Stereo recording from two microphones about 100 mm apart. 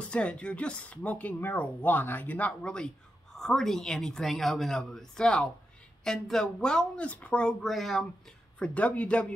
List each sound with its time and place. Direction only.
0.0 s a woman's voice: 10° left (ahead or behind)
7.6 s a woman's voice: centre (ahead or behind)
8.5 s speech: 15° left (ahead or behind)